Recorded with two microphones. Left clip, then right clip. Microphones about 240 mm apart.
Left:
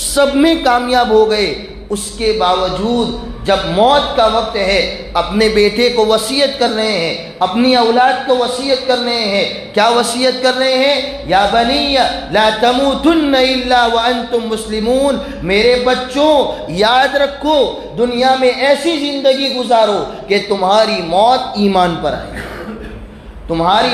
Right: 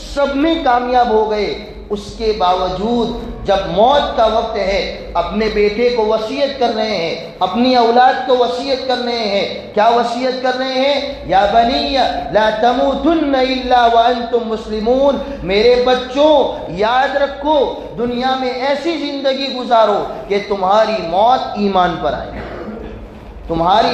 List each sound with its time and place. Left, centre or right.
0.2 s a man's voice: left
23.5 s a man's voice: left